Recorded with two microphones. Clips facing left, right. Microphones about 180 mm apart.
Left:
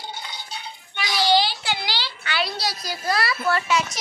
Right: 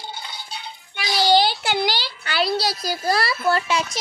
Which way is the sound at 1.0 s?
35° right (ahead or behind).